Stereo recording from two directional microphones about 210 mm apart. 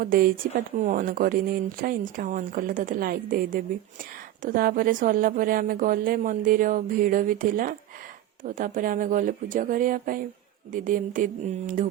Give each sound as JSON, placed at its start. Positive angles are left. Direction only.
{"t": 0.0, "sound": "a woman's voice", "side_deg": -45}